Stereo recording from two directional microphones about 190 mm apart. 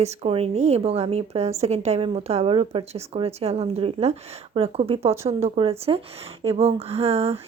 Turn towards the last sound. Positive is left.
turn(degrees=-35)  # may be behind; listen again after turning